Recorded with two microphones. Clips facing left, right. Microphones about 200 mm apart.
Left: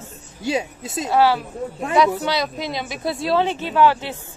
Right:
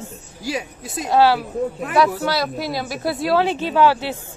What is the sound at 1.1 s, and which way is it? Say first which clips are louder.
Speech: right 2 dB; 15° right (ahead or behind).